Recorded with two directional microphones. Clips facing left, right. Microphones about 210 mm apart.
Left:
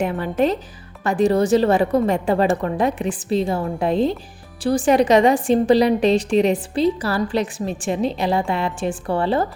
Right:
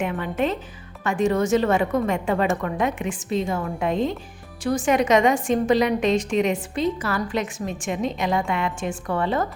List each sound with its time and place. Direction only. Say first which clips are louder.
0.0 s a woman's voice: left 4 dB; 35° left (ahead or behind)